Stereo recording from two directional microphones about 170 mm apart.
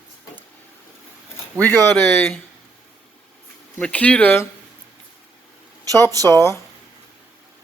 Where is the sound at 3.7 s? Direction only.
10° left (ahead or behind).